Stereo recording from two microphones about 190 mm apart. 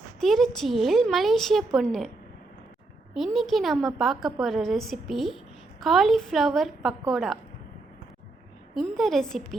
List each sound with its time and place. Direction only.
0.2 s a woman's voice: centre (ahead or behind)
3.2 s a woman's voice: centre (ahead or behind)
8.7 s a woman's voice: centre (ahead or behind)